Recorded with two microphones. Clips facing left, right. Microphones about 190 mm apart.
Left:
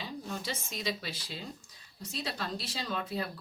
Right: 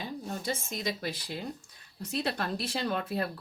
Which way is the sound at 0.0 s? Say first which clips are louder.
Right 3 dB; 50° right (ahead or behind).